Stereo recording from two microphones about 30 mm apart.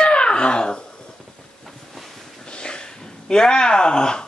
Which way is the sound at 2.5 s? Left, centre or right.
Left.